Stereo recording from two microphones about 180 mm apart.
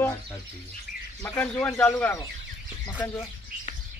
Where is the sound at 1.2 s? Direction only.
10° left (ahead or behind).